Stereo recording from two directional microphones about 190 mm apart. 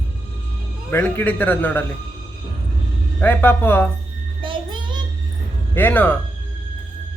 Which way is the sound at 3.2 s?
10° left (ahead or behind).